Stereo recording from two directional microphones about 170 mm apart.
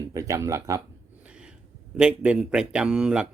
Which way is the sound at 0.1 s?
20° right (ahead or behind).